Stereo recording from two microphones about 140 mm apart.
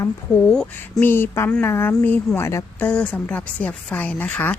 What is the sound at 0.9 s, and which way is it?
Speech, 15° left (ahead or behind).